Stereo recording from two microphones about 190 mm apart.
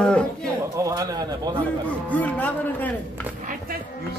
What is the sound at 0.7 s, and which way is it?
Speech, 15° right (ahead or behind).